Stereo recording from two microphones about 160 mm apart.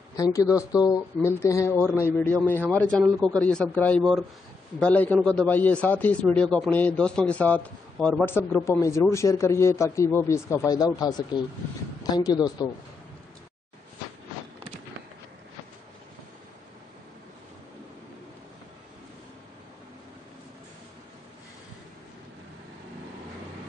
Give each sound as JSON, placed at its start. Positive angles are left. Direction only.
{"t": 0.1, "sound": "a man's voice", "side_deg": 20}